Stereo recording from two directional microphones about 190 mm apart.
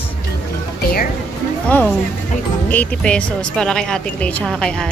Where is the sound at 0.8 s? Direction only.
50° left (ahead or behind).